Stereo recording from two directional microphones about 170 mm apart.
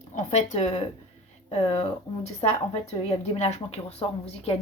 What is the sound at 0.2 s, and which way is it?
A woman's voice, 45° left (ahead or behind).